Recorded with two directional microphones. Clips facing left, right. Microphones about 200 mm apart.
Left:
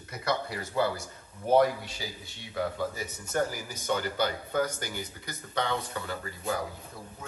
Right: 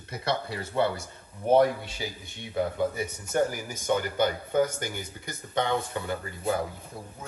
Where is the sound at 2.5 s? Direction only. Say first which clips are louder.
Right 4 dB; 20° right (ahead or behind).